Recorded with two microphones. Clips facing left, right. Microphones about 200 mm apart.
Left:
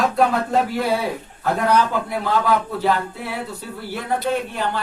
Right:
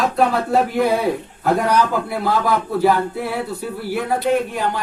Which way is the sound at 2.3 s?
10° right (ahead or behind).